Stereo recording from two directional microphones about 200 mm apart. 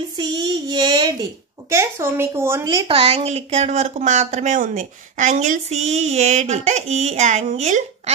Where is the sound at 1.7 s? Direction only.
15° right (ahead or behind).